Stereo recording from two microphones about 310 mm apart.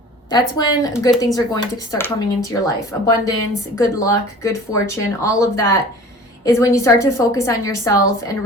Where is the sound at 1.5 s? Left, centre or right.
Centre.